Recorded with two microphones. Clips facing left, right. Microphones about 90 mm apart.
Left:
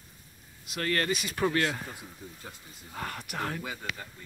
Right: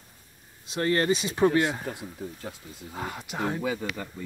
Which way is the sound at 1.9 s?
65° right (ahead or behind).